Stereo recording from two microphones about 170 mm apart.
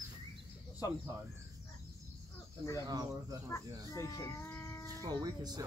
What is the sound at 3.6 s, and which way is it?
Speech, 20° right (ahead or behind).